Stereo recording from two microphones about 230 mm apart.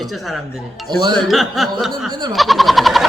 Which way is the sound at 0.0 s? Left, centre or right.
Centre.